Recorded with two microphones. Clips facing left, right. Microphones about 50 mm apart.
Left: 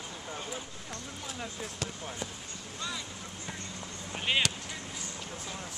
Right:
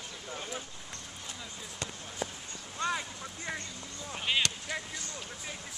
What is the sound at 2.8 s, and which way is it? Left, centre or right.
Speech, right.